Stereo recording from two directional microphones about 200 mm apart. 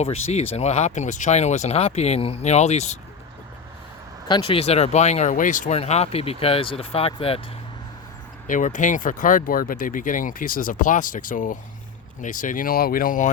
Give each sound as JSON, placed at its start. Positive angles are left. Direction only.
{"t": 0.0, "sound": "speech", "side_deg": 30}
{"t": 4.3, "sound": "speech", "side_deg": 25}
{"t": 8.4, "sound": "speech", "side_deg": 40}